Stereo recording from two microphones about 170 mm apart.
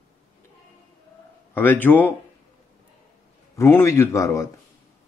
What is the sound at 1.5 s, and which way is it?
Speech, 10° left (ahead or behind).